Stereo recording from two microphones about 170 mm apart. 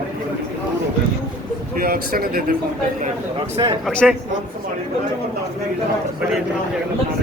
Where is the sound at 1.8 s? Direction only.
60° right (ahead or behind).